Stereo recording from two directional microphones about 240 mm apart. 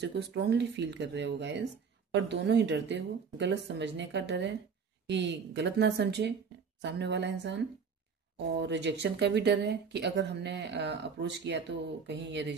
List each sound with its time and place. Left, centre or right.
0.0 s speech: right